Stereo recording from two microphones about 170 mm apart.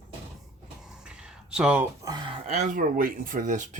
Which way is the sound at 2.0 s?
25° right (ahead or behind).